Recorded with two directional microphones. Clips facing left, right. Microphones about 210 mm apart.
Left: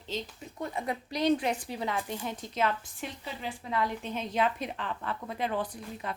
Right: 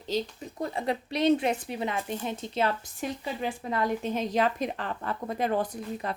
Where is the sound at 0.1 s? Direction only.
40° right (ahead or behind).